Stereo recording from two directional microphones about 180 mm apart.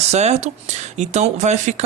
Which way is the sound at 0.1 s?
40° right (ahead or behind).